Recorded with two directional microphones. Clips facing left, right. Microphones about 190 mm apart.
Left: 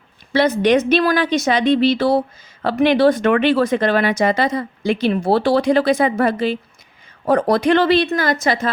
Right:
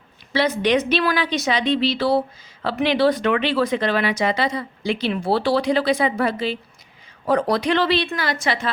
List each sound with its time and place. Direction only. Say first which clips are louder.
0.3 s a woman's voice: left 4 dB; 45° left (ahead or behind)